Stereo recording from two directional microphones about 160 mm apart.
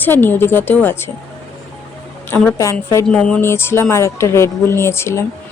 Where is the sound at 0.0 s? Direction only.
10° left (ahead or behind).